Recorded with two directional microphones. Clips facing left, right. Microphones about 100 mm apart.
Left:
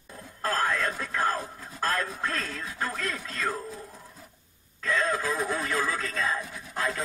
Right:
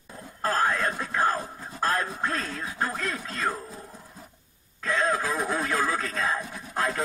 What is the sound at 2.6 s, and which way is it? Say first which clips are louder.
Music: right 2 dB; 25° right (ahead or behind).